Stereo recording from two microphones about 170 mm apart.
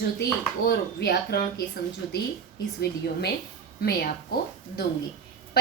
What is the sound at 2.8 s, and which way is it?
A child's voice, 75° left (ahead or behind).